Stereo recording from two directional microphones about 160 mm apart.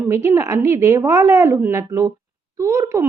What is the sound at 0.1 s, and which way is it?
A woman's voice, 15° right (ahead or behind).